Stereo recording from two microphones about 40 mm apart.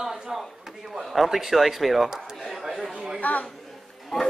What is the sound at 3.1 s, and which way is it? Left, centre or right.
Speech, left.